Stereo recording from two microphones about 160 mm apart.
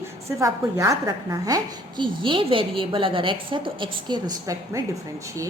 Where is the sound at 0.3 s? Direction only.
20° right (ahead or behind).